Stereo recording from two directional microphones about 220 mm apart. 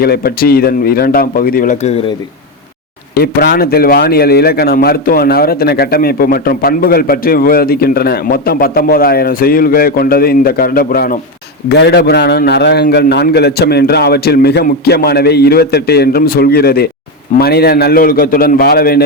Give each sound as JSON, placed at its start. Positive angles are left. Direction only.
{"t": 0.0, "sound": "a man's voice", "side_deg": 45}
{"t": 3.5, "sound": "a man's voice", "side_deg": 45}